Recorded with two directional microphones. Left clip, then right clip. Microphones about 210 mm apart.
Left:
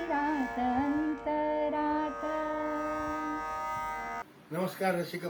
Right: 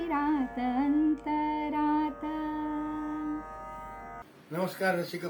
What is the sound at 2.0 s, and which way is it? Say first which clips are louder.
Carnatic music: left 1 dB; 35° left (ahead or behind).